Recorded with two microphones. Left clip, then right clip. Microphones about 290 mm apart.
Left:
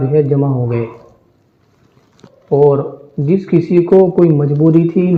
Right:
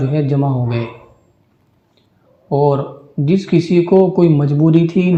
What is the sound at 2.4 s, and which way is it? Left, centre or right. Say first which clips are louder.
Speech: left 4 dB; right.